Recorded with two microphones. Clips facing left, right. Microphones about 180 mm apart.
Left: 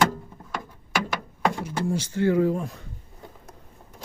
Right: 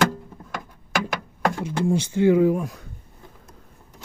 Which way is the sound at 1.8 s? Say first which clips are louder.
Right 5 dB; 15° right (ahead or behind).